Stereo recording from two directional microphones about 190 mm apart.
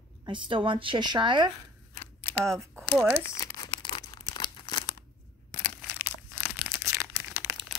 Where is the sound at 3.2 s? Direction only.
15° left (ahead or behind).